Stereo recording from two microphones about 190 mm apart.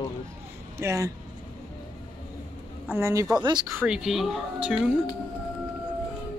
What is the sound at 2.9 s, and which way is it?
Speech, 15° right (ahead or behind).